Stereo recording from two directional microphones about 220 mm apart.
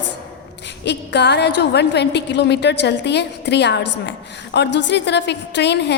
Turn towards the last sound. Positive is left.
turn(degrees=50)  # may be behind; listen again after turning